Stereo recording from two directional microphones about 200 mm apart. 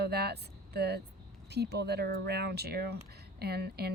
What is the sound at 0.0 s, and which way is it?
Vehicle, 55° right (ahead or behind).